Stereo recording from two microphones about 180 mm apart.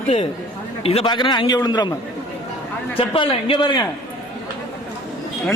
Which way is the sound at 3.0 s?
30° left (ahead or behind).